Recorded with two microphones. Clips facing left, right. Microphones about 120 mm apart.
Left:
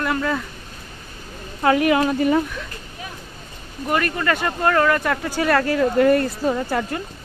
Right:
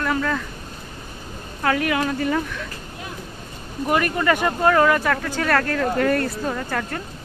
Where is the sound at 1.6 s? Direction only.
20° left (ahead or behind).